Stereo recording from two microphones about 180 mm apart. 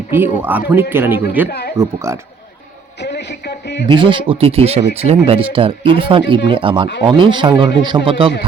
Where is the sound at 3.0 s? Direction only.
65° left (ahead or behind).